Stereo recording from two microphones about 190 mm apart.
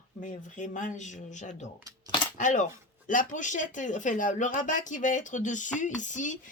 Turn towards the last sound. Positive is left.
turn(degrees=40)  # may be behind; listen again after turning